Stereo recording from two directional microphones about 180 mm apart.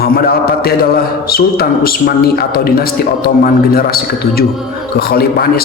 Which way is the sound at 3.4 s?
55° left (ahead or behind).